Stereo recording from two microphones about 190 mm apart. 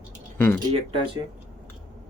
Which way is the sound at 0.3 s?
10° left (ahead or behind).